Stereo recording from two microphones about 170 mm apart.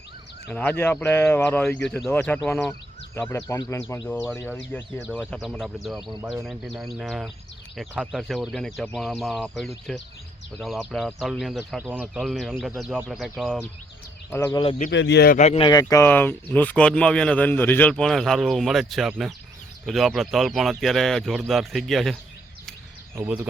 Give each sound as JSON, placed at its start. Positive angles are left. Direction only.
{"t": 0.4, "sound": "speech", "side_deg": 10}
{"t": 3.4, "sound": "speech", "side_deg": 20}
{"t": 4.0, "sound": "speech", "side_deg": 0}
{"t": 4.4, "sound": "speech", "side_deg": 10}
{"t": 5.3, "sound": "speech", "side_deg": 0}
{"t": 14.3, "sound": "speech", "side_deg": 15}
{"t": 14.8, "sound": "speech", "side_deg": 90}
{"t": 15.4, "sound": "speech", "side_deg": 40}
{"t": 15.6, "sound": "speech", "side_deg": 20}
{"t": 23.1, "sound": "speech", "side_deg": -10}